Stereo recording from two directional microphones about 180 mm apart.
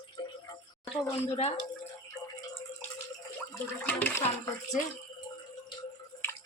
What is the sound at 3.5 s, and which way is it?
Toilet flush, 10° left (ahead or behind).